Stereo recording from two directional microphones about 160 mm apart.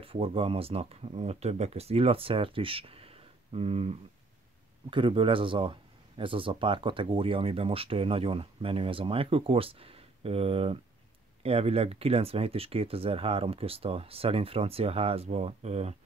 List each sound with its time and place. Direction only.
0.0 s speech: 35° right (ahead or behind)